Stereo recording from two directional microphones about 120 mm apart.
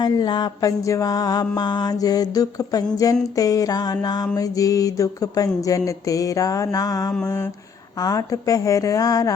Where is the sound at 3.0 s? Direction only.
30° left (ahead or behind).